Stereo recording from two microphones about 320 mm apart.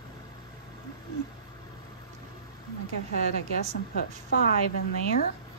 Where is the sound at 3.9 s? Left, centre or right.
Left.